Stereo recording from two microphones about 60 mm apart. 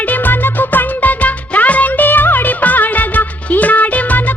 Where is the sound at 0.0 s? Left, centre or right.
Left.